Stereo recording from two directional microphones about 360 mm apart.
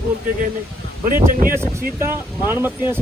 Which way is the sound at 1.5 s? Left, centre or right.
Centre.